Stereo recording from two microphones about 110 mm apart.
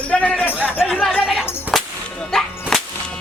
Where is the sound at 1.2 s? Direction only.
5° right (ahead or behind).